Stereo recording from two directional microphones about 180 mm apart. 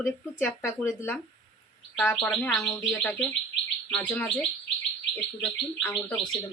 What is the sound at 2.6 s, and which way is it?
Speech, 10° left (ahead or behind).